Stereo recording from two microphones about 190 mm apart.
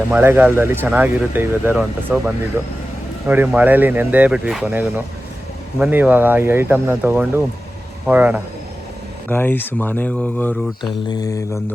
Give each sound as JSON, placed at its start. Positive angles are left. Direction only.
{"t": 0.1, "sound": "speech", "side_deg": -10}
{"t": 9.3, "sound": "speech", "side_deg": 10}
{"t": 11.1, "sound": "mantra", "side_deg": 20}